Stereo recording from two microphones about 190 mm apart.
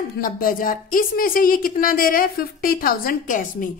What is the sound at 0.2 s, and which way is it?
A woman's voice, 50° left (ahead or behind).